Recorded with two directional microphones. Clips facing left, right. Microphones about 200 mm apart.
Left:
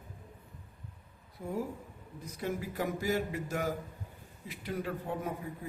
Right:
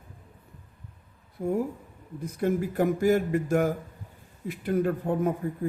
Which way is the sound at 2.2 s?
55° right (ahead or behind).